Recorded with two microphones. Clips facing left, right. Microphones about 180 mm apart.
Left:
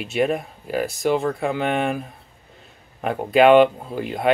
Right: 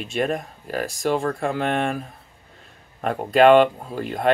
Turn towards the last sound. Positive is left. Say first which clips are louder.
# left 1 dB
turn(degrees=5)  # may be behind; listen again after turning